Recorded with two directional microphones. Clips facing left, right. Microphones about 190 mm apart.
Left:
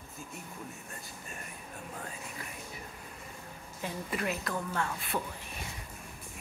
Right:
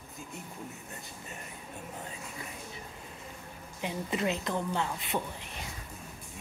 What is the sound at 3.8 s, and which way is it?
A woman's voice, 20° right (ahead or behind).